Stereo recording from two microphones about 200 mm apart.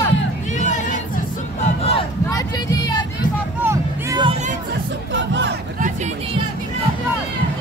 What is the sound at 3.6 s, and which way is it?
Music, 15° right (ahead or behind).